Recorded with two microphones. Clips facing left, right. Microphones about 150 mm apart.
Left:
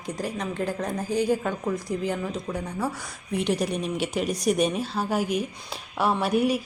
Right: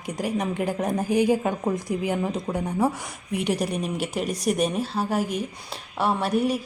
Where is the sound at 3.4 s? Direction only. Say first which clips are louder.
Even; 10° right (ahead or behind).